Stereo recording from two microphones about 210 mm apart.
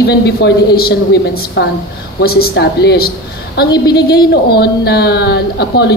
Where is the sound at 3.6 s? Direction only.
20° left (ahead or behind).